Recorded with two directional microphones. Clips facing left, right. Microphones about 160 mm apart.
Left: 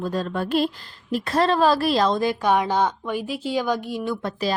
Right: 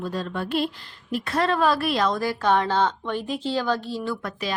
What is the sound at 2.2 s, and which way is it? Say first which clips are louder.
A woman's voice: left 1 dB; 15° left (ahead or behind).